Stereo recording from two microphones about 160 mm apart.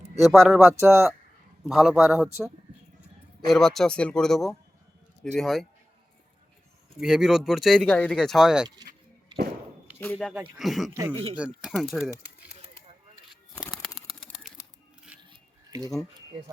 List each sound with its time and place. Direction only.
0.2 s speech: centre (ahead or behind)
3.4 s speech: centre (ahead or behind)
7.0 s speech: 5° right (ahead or behind)
8.6 s speech: 25° right (ahead or behind)
10.0 s speech: 5° left (ahead or behind)
13.7 s bird: centre (ahead or behind)
15.2 s dishes: 25° right (ahead or behind)